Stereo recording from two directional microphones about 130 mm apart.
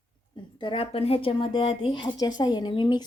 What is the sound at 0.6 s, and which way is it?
A woman's voice, 45° left (ahead or behind).